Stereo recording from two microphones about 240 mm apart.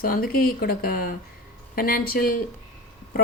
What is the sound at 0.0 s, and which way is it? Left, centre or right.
Speech, left.